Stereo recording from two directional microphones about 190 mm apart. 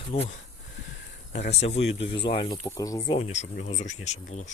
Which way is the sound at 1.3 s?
35° left (ahead or behind).